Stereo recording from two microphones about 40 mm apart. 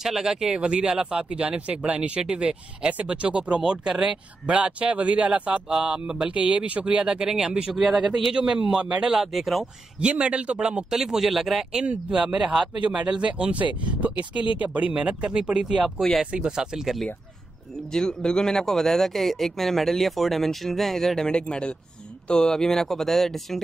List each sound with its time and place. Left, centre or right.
0.0 s speech: centre
0.5 s speech: right
4.5 s speech: right
7.7 s speech: centre
8.3 s speech: right
8.6 s speech: centre
9.1 s speech: centre
9.9 s speech: right
10.9 s speech: centre
11.8 s speech: right
17.9 s speech: centre
21.3 s speech: left; by 23.6 s centre